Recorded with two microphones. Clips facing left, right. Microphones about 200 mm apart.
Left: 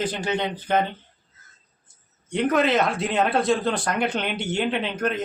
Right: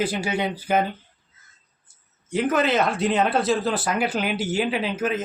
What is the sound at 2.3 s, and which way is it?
Speech, centre (ahead or behind).